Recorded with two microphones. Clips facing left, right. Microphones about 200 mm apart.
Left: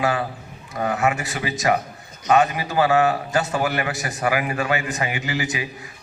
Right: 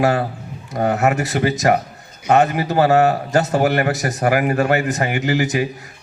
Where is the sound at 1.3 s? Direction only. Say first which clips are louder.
Right 5 dB; 55° right (ahead or behind).